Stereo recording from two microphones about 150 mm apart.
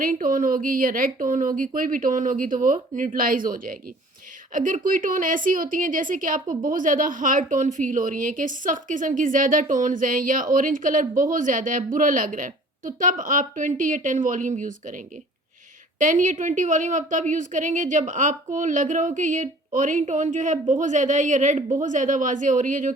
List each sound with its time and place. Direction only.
0.0 s a woman's voice: 65° right (ahead or behind)